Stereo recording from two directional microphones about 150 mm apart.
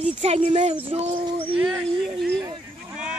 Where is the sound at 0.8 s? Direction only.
40° right (ahead or behind).